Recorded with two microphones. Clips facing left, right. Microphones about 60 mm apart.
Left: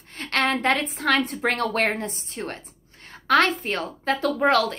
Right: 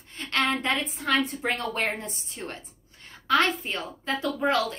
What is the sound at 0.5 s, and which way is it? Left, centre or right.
A woman's voice, left.